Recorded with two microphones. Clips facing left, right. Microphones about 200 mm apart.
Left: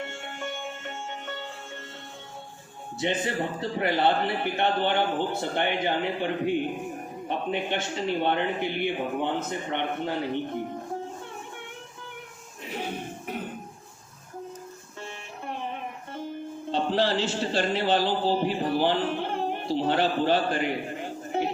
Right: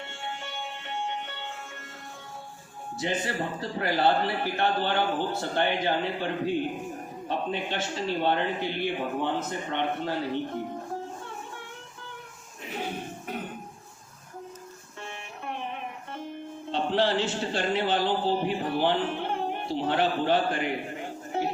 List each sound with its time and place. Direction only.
0.0 s music: 50° left (ahead or behind)
3.0 s a man's voice: 20° left (ahead or behind)
16.9 s speech: 35° left (ahead or behind)